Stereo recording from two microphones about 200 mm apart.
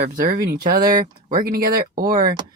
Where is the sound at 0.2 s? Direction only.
40° right (ahead or behind).